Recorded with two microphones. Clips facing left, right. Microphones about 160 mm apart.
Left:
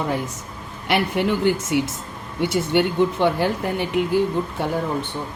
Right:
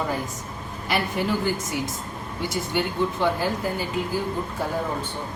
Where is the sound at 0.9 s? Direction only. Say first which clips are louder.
Left 4 dB; 70° left (ahead or behind).